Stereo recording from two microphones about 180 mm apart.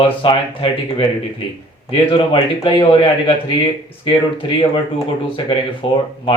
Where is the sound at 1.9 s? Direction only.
30° left (ahead or behind).